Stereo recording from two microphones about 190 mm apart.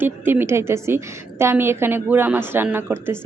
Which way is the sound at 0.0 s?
10° right (ahead or behind).